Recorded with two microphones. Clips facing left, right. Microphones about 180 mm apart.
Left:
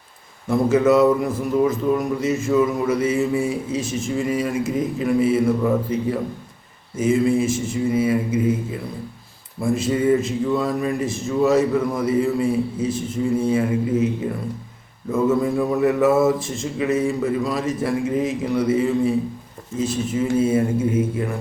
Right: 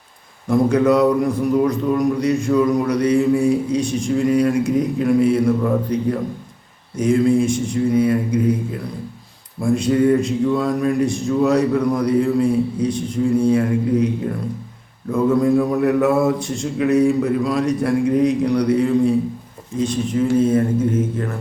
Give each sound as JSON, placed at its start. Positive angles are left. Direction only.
{"t": 0.4, "sound": "a man's voice", "side_deg": 5}